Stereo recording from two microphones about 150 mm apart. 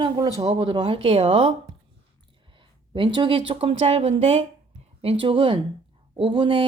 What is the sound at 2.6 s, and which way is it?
Speech, 35° right (ahead or behind).